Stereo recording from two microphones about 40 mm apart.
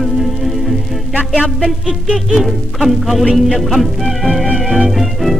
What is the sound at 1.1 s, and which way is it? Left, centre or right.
Music, right.